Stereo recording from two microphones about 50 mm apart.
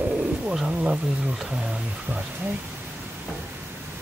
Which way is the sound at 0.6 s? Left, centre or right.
Right.